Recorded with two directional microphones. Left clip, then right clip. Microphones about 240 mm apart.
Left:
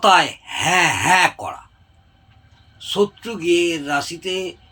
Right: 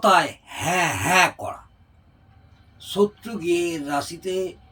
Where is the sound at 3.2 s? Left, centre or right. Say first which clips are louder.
Left 5 dB; centre.